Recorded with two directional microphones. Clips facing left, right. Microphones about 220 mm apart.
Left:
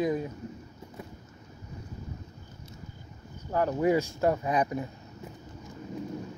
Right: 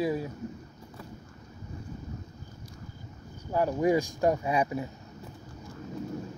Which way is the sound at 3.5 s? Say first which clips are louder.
Even; 15° right (ahead or behind).